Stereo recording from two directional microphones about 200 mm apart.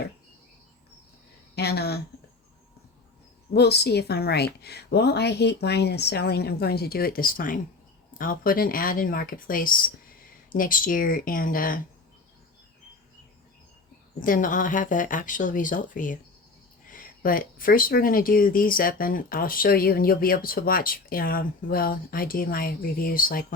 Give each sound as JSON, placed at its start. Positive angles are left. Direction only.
{"t": 1.5, "sound": "speech", "side_deg": 55}
{"t": 3.5, "sound": "a woman's voice", "side_deg": 55}
{"t": 14.2, "sound": "speech", "side_deg": 40}